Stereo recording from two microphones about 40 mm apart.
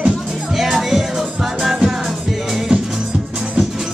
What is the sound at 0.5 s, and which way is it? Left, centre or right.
Music, centre.